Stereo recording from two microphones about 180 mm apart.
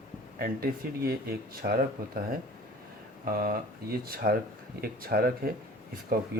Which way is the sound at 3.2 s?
55° right (ahead or behind).